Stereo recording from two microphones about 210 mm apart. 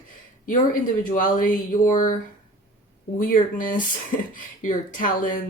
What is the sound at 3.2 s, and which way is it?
Speech, 40° left (ahead or behind).